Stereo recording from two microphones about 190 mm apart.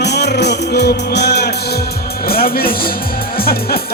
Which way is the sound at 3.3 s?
50° left (ahead or behind).